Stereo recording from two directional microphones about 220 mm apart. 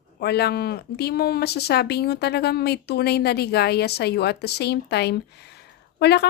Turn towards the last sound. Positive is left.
turn(degrees=50)  # may be behind; listen again after turning